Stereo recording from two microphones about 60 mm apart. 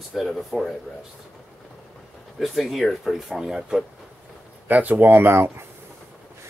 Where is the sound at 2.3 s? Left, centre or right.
Centre.